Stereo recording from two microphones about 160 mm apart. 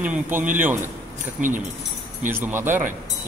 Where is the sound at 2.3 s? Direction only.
15° right (ahead or behind).